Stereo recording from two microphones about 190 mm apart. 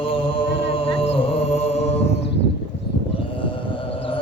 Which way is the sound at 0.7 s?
30° left (ahead or behind).